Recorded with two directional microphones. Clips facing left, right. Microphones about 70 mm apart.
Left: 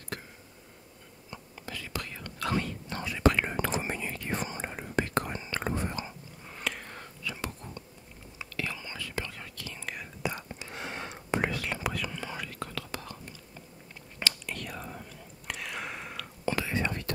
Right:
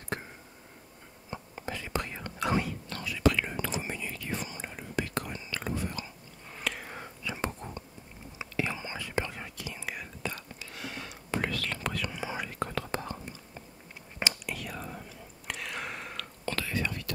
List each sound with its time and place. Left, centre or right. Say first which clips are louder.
1.3 s whispering: right 4 dB; right
2.9 s whispering: left 2 dB; left
6.5 s a sound: even; centre
6.9 s whispering: right 1 dB; centre
7.4 s whispering: right 4 dB; right
9.8 s whispering: even; centre
10.2 s whispering: left 5 dB; left
11.8 s whispering: left 1 dB; centre
12.1 s whispering: right 2 dB; centre; by 13.2 s right
14.4 s whispering: right 1 dB; centre
16.4 s whispering: left 3 dB; centre